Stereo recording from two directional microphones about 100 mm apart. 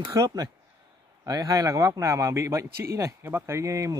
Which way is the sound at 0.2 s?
35° right (ahead or behind).